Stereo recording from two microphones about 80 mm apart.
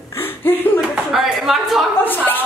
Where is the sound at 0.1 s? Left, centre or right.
Left.